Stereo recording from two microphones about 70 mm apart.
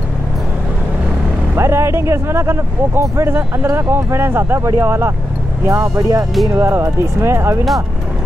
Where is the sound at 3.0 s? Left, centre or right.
Right.